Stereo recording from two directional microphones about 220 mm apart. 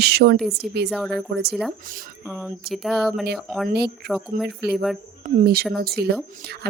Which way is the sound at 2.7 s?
Centre (ahead or behind).